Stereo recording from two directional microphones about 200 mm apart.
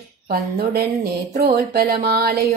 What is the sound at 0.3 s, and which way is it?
Music, 50° right (ahead or behind).